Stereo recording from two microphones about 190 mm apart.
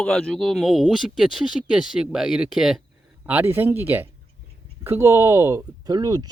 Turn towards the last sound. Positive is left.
turn(degrees=-20)  # may be behind; listen again after turning